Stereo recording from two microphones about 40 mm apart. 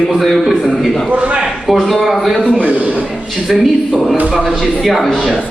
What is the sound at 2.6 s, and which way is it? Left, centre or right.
Speech, right.